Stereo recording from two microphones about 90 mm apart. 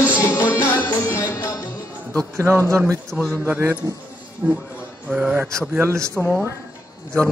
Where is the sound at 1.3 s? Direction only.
40° left (ahead or behind).